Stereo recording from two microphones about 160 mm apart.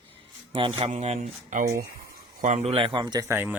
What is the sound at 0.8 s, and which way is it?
Speech, 45° right (ahead or behind).